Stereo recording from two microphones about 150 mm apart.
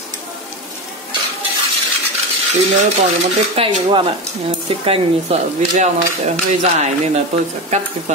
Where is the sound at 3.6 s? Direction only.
40° right (ahead or behind).